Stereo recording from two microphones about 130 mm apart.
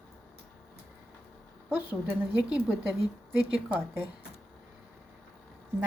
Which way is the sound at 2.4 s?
5° right (ahead or behind).